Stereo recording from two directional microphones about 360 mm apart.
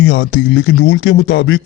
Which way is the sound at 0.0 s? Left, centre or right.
Left.